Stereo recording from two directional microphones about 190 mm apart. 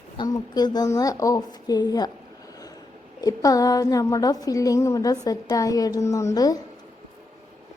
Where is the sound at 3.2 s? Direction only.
20° left (ahead or behind).